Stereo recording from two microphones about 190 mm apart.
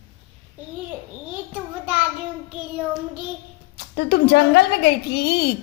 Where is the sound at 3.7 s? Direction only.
60° left (ahead or behind).